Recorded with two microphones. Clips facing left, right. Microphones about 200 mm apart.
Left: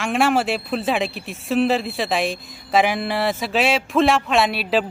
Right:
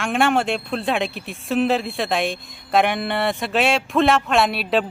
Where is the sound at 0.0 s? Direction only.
Centre (ahead or behind).